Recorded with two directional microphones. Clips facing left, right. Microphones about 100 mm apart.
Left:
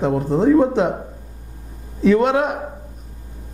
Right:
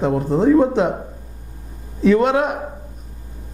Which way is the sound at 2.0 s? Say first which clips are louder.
Even; 15° right (ahead or behind).